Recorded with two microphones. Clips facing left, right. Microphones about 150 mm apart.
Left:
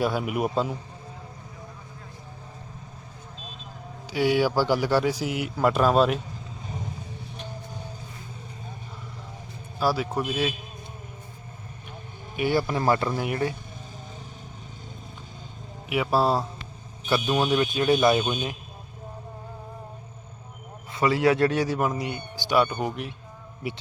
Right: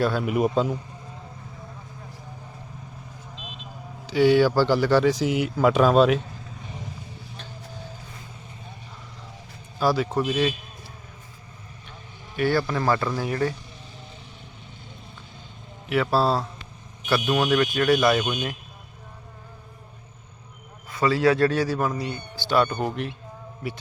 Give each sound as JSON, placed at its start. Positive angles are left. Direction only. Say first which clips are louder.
{"t": 0.0, "sound": "speech", "louder": "right 3 dB", "side_deg": 10}
{"t": 4.0, "sound": "speech", "louder": "right 5 dB", "side_deg": 10}
{"t": 9.8, "sound": "speech", "louder": "right 3 dB", "side_deg": 5}
{"t": 12.4, "sound": "a man's voice", "louder": "right 1 dB", "side_deg": 20}
{"t": 15.9, "sound": "speech", "louder": "right 1 dB", "side_deg": 10}
{"t": 17.2, "sound": "speech", "louder": "right 1 dB", "side_deg": 30}
{"t": 17.6, "sound": "a man's voice", "louder": "right 1 dB", "side_deg": 20}
{"t": 20.9, "sound": "a man's voice", "louder": "right 1 dB", "side_deg": 20}